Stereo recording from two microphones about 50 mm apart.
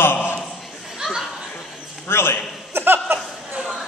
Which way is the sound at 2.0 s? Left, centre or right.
Left.